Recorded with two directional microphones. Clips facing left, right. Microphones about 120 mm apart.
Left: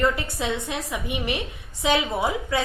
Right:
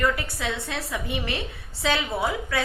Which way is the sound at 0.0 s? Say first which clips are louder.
Left 2 dB; 25° left (ahead or behind).